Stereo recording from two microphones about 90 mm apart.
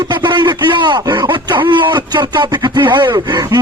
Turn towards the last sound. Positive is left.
turn(degrees=-45)  # may be behind; listen again after turning